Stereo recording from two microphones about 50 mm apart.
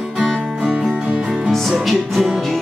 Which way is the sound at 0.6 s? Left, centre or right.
Right.